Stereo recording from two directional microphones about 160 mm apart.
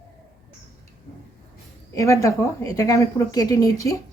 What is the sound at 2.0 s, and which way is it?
Speech, 20° left (ahead or behind).